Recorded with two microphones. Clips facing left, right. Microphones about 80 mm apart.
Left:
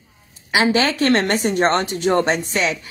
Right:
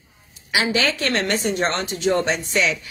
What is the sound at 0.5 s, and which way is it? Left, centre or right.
Speech, left.